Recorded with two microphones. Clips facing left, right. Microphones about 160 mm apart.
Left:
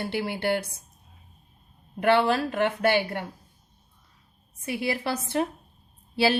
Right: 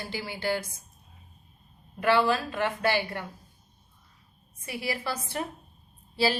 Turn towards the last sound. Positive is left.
turn(degrees=65)  # may be behind; listen again after turning